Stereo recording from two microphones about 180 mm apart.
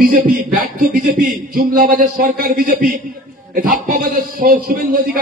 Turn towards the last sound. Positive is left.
turn(degrees=-50)  # may be behind; listen again after turning